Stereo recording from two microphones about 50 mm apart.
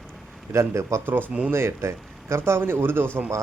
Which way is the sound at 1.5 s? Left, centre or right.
Right.